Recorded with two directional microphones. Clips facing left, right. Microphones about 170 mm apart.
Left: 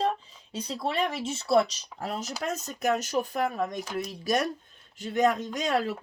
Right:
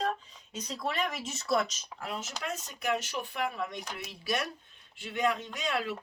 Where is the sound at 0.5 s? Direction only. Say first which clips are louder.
Left 4 dB; 30° left (ahead or behind).